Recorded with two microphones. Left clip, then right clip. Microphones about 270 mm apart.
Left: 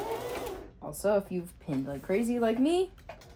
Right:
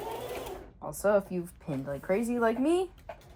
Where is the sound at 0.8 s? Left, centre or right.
Centre.